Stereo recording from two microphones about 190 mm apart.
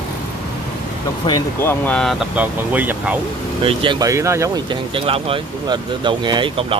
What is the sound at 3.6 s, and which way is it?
Speech, 25° right (ahead or behind).